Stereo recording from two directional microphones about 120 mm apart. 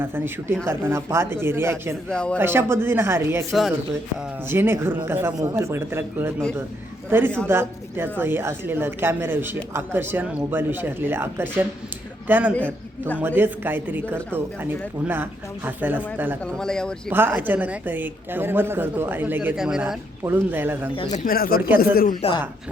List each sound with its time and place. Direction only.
0.0 s a man's voice: 15° right (ahead or behind)
2.0 s speech: 5° left (ahead or behind)
2.4 s a man's voice: 20° right (ahead or behind)
3.5 s speech: centre (ahead or behind)
4.4 s a man's voice: 20° right (ahead or behind)
12.5 s a man's voice: 10° left (ahead or behind)
13.1 s speech: 15° right (ahead or behind)
16.4 s speech: 5° left (ahead or behind)
17.1 s speech: 15° right (ahead or behind)
20.2 s speech: 15° right (ahead or behind)
22.2 s speech: 60° left (ahead or behind)